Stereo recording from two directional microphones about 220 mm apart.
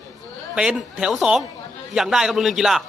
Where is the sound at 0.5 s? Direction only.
5° right (ahead or behind).